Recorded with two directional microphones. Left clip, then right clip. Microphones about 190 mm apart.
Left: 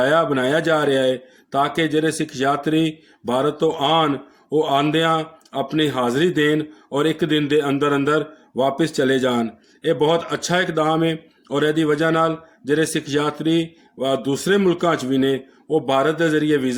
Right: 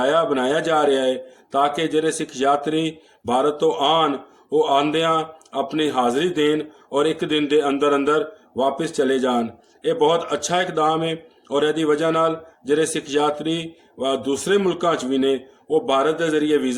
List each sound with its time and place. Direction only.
0.0 s a man's voice: 50° left (ahead or behind)